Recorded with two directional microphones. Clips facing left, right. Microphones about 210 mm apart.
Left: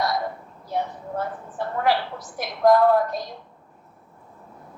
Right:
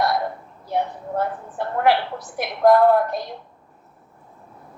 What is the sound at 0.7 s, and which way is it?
A woman's voice, 60° right (ahead or behind).